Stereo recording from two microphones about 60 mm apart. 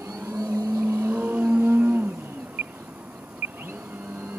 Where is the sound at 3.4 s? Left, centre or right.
Right.